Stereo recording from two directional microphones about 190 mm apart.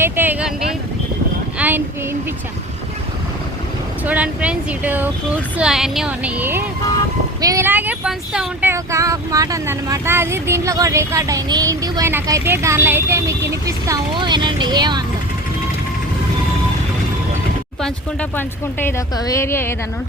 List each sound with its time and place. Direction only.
0.0 s vehicle: 10° right (ahead or behind)
1.5 s a sound: 10° right (ahead or behind)
4.0 s speech: 5° right (ahead or behind); by 15.0 s 20° right (ahead or behind)
17.7 s speech: 5° left (ahead or behind)